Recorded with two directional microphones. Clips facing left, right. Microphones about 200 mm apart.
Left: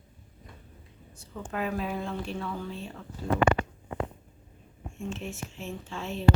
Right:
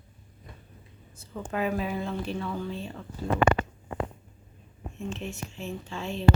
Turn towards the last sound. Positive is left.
turn(degrees=0)  # may be behind; listen again after turning